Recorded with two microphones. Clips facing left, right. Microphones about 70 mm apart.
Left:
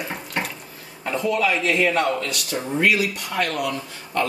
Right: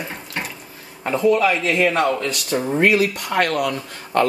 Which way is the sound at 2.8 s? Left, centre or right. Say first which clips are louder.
Right 3 dB; right.